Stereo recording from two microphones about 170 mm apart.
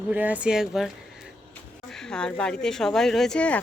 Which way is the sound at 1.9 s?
5° left (ahead or behind).